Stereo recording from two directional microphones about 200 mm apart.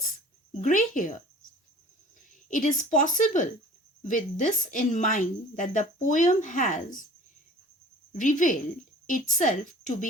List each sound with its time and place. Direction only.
0.6 s a woman's voice: 40° left (ahead or behind)
2.5 s a woman's voice: 40° left (ahead or behind)
8.1 s a woman's voice: 40° left (ahead or behind)